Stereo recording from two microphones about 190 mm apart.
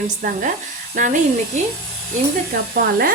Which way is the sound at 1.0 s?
45° right (ahead or behind).